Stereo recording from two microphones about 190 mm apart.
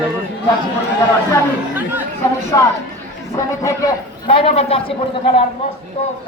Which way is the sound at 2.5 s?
20° left (ahead or behind).